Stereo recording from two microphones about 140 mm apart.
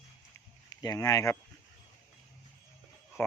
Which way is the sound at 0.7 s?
25° left (ahead or behind).